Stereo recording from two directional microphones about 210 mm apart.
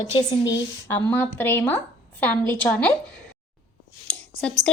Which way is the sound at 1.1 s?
10° left (ahead or behind).